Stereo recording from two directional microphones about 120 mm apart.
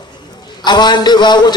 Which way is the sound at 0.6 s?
35° left (ahead or behind).